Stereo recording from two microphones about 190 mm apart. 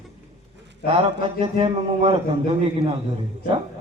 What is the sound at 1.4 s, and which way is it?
A man's voice, 30° right (ahead or behind).